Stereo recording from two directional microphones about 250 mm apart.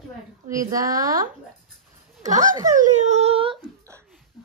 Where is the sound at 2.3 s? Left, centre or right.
Right.